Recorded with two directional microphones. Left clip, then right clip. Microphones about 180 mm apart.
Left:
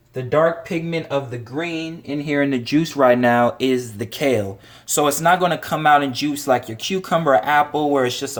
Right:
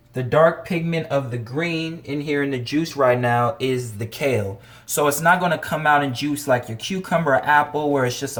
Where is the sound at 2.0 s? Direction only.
25° left (ahead or behind).